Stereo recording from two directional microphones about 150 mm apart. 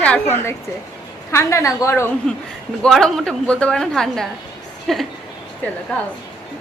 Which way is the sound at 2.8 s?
5° left (ahead or behind).